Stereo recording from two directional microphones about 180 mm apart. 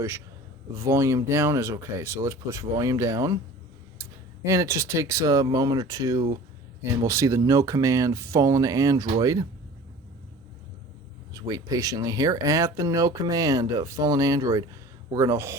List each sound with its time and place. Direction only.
0.7 s speech: 15° right (ahead or behind)
4.4 s speech: 15° right (ahead or behind)
11.3 s speech: 20° right (ahead or behind)